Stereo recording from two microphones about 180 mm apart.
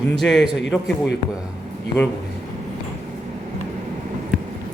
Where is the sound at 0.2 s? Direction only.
Centre (ahead or behind).